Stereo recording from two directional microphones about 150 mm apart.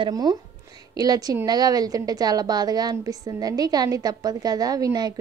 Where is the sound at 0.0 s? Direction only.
25° right (ahead or behind).